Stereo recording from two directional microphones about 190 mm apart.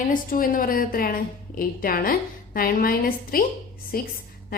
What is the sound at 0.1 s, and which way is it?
A woman's voice, 45° left (ahead or behind).